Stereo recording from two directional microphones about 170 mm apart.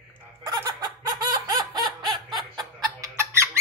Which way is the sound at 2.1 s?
25° right (ahead or behind).